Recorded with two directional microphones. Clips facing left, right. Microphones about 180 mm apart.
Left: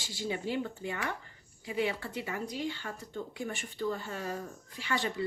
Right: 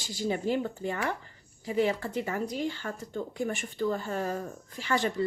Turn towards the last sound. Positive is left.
turn(degrees=-45)  # may be behind; listen again after turning